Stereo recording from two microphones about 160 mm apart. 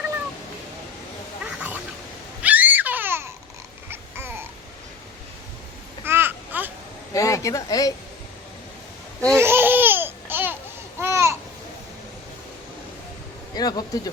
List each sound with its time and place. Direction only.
1.5 s duck: 10° right (ahead or behind)
2.4 s babbling: 10° right (ahead or behind)
6.1 s babbling: 15° right (ahead or behind)
7.1 s speech: 20° left (ahead or behind)
9.3 s laughter: 15° right (ahead or behind)
11.0 s babbling: 15° right (ahead or behind)
13.5 s speech: 25° left (ahead or behind)